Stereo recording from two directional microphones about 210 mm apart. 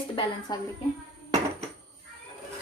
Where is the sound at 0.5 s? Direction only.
20° left (ahead or behind).